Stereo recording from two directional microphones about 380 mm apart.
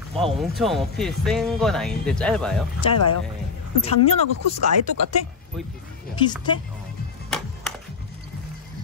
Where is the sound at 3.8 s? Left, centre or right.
Centre.